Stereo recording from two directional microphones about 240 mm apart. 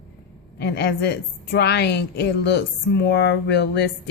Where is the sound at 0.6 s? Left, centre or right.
Left.